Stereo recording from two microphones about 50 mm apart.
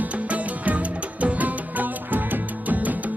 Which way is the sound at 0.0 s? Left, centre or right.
Right.